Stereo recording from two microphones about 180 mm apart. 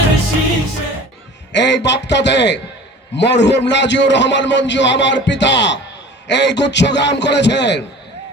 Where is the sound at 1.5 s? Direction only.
75° left (ahead or behind).